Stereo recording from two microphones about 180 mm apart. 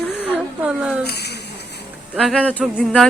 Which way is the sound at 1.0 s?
65° left (ahead or behind).